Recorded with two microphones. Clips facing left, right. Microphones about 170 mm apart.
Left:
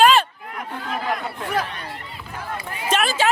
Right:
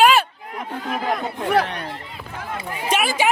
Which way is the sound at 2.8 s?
10° right (ahead or behind).